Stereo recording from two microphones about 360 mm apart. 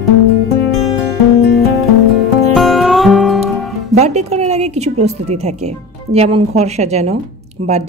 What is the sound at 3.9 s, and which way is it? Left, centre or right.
A woman's voice, centre.